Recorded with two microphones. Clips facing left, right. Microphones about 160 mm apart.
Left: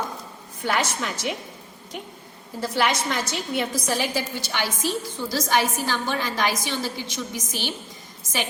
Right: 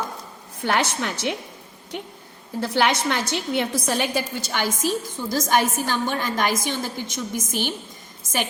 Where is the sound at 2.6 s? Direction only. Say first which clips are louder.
Right 2 dB; 65° right (ahead or behind).